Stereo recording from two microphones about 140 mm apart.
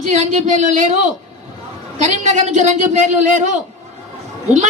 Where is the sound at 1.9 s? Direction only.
55° right (ahead or behind).